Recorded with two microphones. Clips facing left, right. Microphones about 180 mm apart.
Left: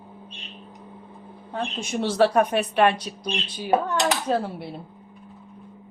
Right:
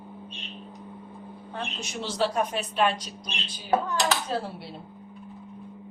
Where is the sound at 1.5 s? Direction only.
55° left (ahead or behind).